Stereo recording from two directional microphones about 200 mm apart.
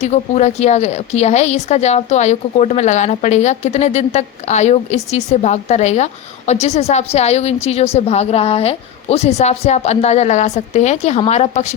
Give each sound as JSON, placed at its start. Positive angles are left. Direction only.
{"t": 0.0, "sound": "a woman's voice", "side_deg": 35}